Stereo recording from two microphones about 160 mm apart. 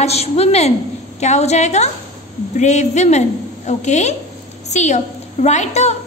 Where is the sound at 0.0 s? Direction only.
40° left (ahead or behind).